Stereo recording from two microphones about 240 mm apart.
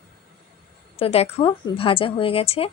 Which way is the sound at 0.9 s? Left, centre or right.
Left.